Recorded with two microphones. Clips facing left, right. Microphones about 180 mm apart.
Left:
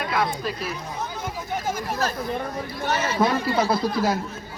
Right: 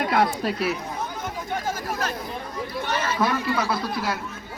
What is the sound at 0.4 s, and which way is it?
Speech, 70° right (ahead or behind).